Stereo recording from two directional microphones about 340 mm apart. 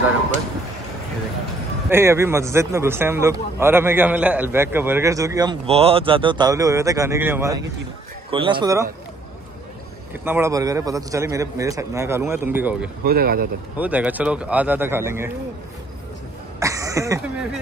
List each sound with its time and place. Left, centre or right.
1.9 s a man's voice: centre
10.2 s a man's voice: centre
13.0 s speech: right
13.7 s speech: centre
16.5 s throat clearing: centre